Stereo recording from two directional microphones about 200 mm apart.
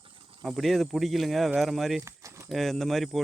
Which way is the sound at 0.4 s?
Centre (ahead or behind).